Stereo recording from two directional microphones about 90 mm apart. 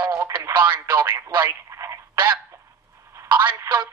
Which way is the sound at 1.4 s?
30° right (ahead or behind).